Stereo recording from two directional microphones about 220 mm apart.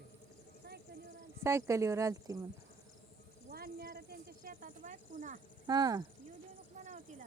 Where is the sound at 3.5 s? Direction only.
45° right (ahead or behind).